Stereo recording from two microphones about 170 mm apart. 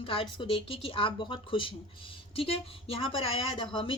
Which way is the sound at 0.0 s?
30° left (ahead or behind).